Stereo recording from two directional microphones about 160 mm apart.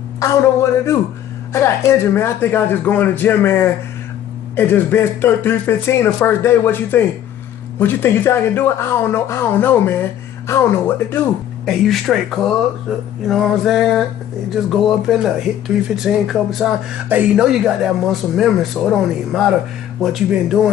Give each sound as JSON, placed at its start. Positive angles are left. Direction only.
{"t": 0.2, "sound": "speech", "side_deg": 20}
{"t": 11.6, "sound": "speech", "side_deg": 0}